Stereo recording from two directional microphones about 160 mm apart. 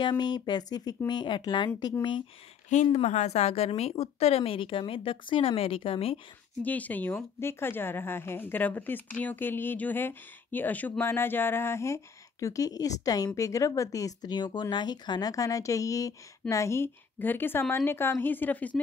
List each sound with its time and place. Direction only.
0.0 s speech: 25° left (ahead or behind)
2.7 s a woman's voice: 45° left (ahead or behind)
6.6 s speech: 10° left (ahead or behind)